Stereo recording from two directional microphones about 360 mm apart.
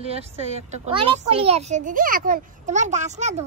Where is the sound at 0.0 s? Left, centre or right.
Centre.